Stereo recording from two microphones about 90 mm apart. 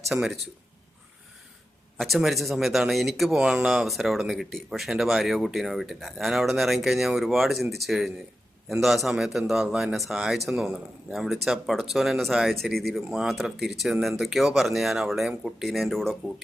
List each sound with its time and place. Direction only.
0.1 s a man's voice: 5° right (ahead or behind)
2.0 s a man's voice: centre (ahead or behind)